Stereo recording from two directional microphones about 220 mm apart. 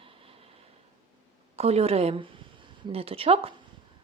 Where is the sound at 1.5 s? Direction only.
30° right (ahead or behind).